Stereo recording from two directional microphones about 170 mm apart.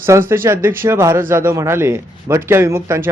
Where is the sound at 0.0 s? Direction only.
15° right (ahead or behind).